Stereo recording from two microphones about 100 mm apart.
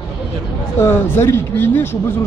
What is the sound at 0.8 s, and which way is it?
Speech, 25° left (ahead or behind).